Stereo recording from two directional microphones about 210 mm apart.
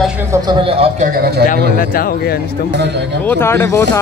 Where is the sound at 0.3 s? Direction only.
20° right (ahead or behind).